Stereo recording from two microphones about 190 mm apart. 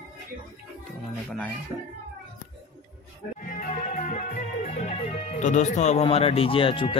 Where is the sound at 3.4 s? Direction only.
45° left (ahead or behind); by 7.0 s 25° left (ahead or behind).